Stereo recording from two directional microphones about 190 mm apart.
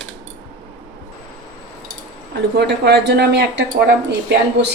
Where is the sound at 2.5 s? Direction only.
60° right (ahead or behind).